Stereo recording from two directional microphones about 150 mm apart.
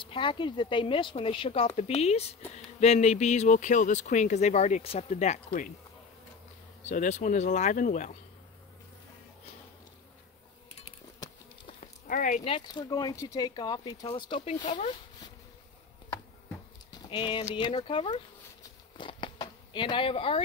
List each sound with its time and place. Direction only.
0.0 s speech: 35° left (ahead or behind)
6.8 s speech: 50° left (ahead or behind)
12.1 s speech: 60° left (ahead or behind)
12.4 s speech: 35° left (ahead or behind); by 14.9 s 50° left (ahead or behind)
16.9 s speech: 30° left (ahead or behind)
18.6 s a sound: 35° left (ahead or behind)